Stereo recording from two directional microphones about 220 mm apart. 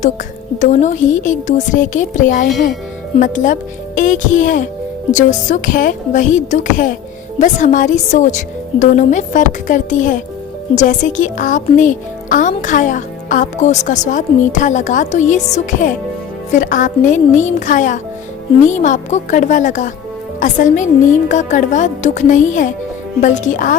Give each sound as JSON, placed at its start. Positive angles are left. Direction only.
{"t": 0.6, "sound": "speech", "side_deg": 35}